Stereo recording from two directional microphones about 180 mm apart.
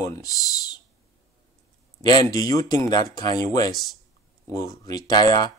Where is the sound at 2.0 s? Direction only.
20° left (ahead or behind).